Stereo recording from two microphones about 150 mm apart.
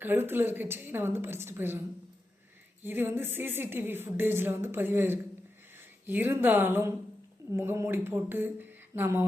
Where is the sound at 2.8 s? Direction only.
15° right (ahead or behind).